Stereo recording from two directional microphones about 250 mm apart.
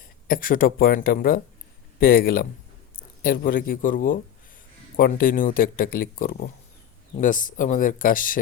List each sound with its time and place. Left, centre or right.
0.3 s speech: left